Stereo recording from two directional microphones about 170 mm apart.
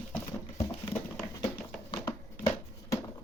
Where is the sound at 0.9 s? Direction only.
15° left (ahead or behind).